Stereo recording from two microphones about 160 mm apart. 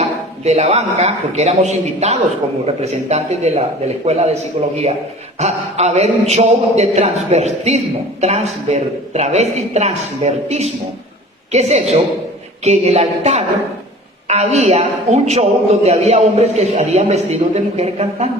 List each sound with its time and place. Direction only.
0.0 s a man's voice: 45° right (ahead or behind)